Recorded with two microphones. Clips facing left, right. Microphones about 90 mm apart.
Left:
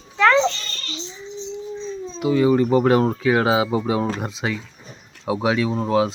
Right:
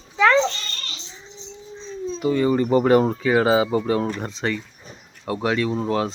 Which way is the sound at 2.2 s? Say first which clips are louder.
Left 3 dB; 5° left (ahead or behind).